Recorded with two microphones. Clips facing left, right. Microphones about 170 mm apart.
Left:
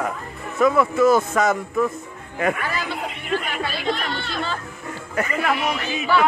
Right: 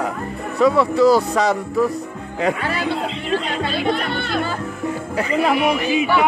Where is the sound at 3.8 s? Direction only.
55° right (ahead or behind).